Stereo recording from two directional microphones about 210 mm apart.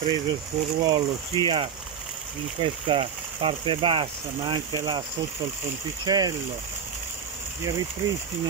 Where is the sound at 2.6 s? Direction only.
25° right (ahead or behind).